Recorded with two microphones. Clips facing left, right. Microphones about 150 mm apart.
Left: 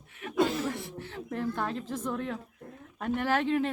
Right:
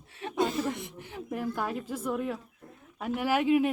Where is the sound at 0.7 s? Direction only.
20° right (ahead or behind).